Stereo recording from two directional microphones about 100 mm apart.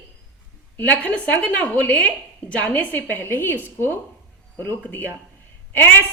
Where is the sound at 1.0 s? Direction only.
10° left (ahead or behind).